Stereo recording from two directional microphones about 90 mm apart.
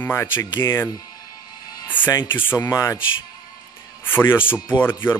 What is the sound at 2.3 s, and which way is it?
Speech, 25° left (ahead or behind).